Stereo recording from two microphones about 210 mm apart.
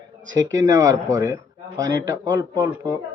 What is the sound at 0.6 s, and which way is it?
Speech, 15° right (ahead or behind).